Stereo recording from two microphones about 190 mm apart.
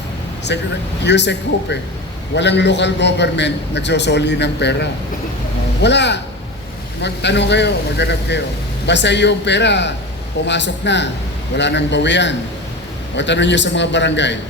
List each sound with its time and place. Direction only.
0.5 s a man's voice: 65° left (ahead or behind)